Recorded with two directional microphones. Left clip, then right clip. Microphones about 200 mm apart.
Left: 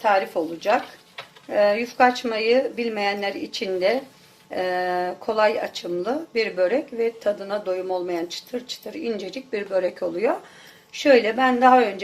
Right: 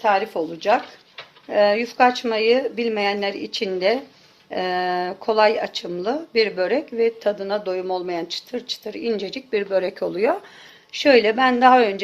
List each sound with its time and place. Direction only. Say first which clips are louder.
0.0 s speech: right 1 dB; 40° right (ahead or behind)